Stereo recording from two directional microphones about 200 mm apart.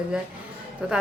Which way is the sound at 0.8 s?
5° right (ahead or behind).